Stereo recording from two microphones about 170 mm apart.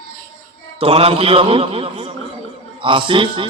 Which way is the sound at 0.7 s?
35° right (ahead or behind).